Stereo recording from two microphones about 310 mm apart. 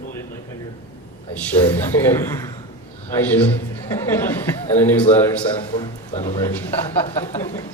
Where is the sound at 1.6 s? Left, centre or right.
Centre.